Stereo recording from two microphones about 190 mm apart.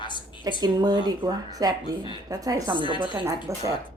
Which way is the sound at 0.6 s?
20° right (ahead or behind).